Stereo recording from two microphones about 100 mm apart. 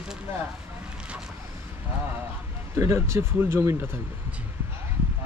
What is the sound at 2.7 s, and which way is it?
Speech, 30° right (ahead or behind).